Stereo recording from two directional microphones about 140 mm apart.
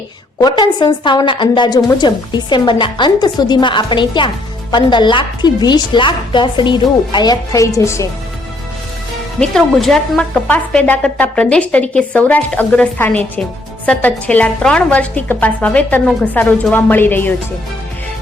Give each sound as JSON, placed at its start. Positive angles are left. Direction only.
{"t": 0.3, "sound": "a woman's voice", "side_deg": 30}
{"t": 9.4, "sound": "a woman's voice", "side_deg": 0}